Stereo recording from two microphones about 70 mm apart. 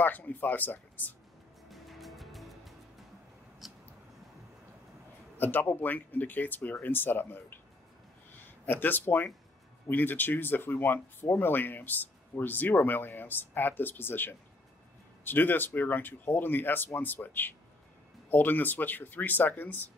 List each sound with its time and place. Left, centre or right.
0.0 s speech: left
1.7 s music: centre
3.6 s a sound: centre
5.4 s speech: left
8.6 s speech: left